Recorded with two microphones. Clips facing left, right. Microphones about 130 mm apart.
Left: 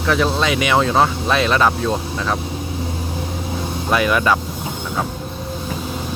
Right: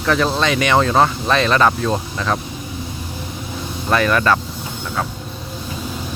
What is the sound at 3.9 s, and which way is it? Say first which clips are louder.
Speech: right 1 dB; 10° left (ahead or behind).